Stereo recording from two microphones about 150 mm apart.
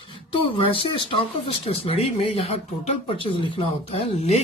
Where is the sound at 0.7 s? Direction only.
35° left (ahead or behind).